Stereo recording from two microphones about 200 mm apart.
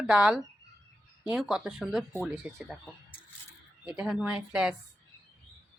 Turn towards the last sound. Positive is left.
turn(degrees=-5)  # may be behind; listen again after turning